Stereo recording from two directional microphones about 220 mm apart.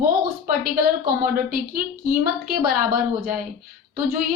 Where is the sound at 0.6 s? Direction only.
40° right (ahead or behind).